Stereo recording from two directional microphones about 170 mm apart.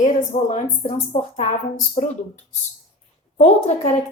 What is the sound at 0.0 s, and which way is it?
A woman's voice, 45° left (ahead or behind).